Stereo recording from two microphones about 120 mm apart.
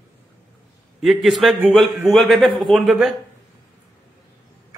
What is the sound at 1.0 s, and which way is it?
A man's voice, centre (ahead or behind).